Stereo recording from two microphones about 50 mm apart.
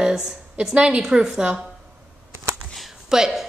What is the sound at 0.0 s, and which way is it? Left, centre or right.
A woman's voice, centre.